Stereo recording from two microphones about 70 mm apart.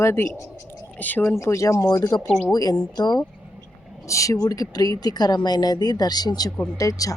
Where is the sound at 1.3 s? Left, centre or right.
Left.